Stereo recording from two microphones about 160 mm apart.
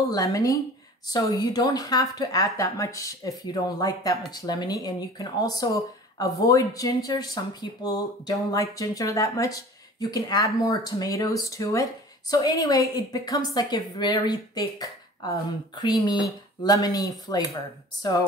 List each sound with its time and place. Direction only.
0.1 s speech: 20° left (ahead or behind)